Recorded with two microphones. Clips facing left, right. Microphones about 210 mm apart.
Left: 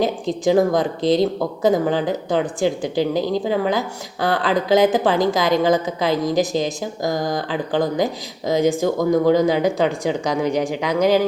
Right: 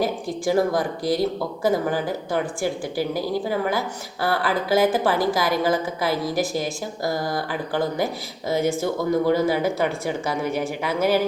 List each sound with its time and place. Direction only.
0.0 s a woman's voice: 20° left (ahead or behind)